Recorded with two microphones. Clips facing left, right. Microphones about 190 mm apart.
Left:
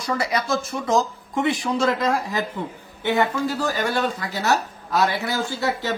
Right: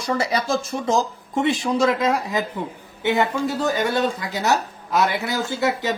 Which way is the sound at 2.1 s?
15° right (ahead or behind).